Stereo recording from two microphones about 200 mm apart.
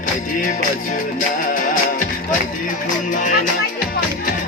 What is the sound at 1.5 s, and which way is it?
Music, 40° left (ahead or behind).